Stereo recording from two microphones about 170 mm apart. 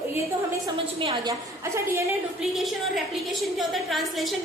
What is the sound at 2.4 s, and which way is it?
A woman's voice, centre (ahead or behind).